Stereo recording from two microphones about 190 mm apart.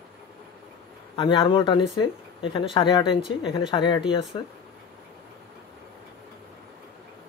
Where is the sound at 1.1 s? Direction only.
25° left (ahead or behind).